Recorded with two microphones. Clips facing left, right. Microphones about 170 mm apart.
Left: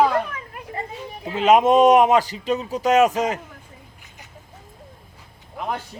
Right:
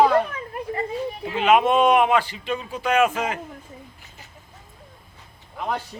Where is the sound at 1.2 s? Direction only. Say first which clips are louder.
Left 3 dB; 40° left (ahead or behind).